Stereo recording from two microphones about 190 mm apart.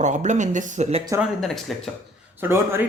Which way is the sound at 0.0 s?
40° right (ahead or behind).